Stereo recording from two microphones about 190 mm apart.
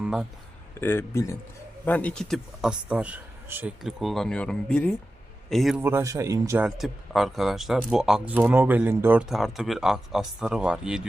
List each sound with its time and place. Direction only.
0.0 s a sound: 5° right (ahead or behind)
0.8 s speech: 10° left (ahead or behind)
5.8 s speech: 15° right (ahead or behind)
6.7 s speech: centre (ahead or behind)